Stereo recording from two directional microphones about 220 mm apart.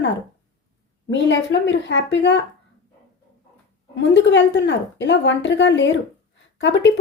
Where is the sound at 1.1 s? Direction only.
55° left (ahead or behind).